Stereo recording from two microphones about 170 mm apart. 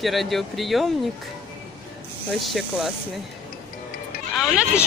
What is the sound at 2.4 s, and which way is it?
Speech, centre (ahead or behind).